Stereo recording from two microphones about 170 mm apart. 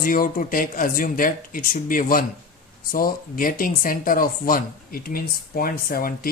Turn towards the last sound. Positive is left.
turn(degrees=60)  # may be behind; listen again after turning